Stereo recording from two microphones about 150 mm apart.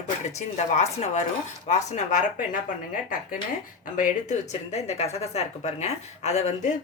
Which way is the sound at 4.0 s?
50° left (ahead or behind).